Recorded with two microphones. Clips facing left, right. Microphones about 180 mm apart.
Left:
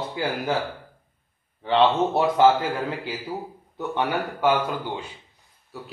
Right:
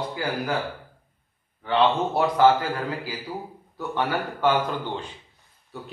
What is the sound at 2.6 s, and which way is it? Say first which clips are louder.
A man's voice: left 1 dB; 25° left (ahead or behind).